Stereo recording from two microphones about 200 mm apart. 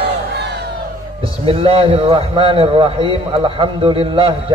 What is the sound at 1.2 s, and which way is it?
A man's voice, 25° right (ahead or behind).